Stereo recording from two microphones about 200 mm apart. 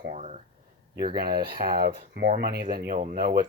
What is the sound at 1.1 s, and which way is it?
Speech, 50° right (ahead or behind).